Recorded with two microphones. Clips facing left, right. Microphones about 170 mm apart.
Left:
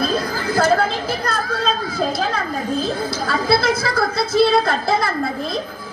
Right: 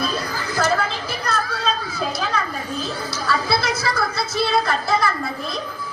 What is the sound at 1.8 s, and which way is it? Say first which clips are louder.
Chatter: left 4 dB; 50° left (ahead or behind).